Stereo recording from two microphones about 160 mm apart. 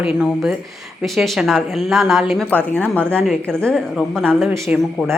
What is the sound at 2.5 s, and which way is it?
A woman's voice, 10° left (ahead or behind).